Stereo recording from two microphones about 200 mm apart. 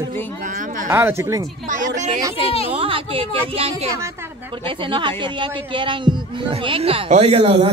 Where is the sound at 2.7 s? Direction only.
25° right (ahead or behind).